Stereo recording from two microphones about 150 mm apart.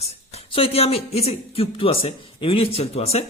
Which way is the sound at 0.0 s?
45° left (ahead or behind).